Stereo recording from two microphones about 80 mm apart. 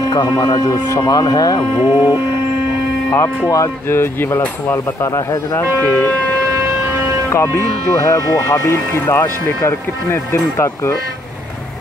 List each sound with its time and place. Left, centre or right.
0.1 s speech: left
1.6 s speech: left
3.4 s speech: left
5.8 s speech: left
7.2 s speech: left